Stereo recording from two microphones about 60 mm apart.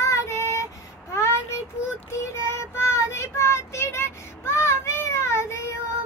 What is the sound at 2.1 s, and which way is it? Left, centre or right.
Child singing, left.